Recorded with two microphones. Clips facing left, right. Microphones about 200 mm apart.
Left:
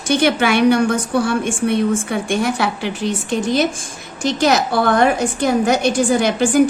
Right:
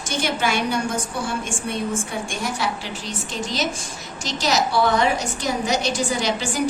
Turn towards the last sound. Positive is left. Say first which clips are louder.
# left 9 dB
turn(degrees=55)  # may be behind; listen again after turning